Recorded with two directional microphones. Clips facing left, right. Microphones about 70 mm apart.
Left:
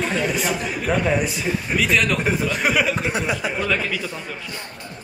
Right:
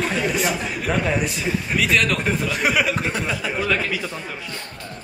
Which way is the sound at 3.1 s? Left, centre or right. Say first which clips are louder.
Left 2 dB; centre.